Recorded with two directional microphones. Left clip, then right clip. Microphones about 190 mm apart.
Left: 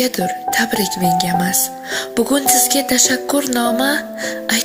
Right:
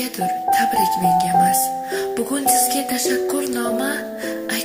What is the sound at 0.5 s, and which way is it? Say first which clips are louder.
Speech: right 3 dB; 40° left (ahead or behind).